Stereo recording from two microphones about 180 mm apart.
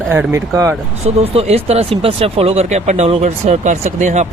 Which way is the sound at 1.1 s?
35° right (ahead or behind).